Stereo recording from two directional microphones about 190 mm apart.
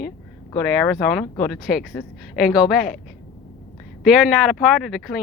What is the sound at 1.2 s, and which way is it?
Speech, centre (ahead or behind).